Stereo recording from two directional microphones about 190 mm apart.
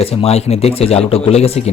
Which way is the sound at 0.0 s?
30° left (ahead or behind).